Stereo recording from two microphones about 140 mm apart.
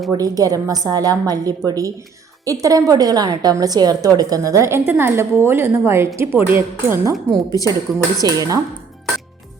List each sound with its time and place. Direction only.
0.1 s a woman's voice: 25° right (ahead or behind)